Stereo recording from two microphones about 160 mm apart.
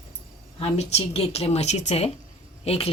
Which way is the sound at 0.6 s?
40° left (ahead or behind).